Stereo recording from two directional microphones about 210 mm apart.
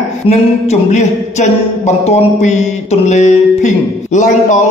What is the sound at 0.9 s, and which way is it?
A man's voice, 35° left (ahead or behind).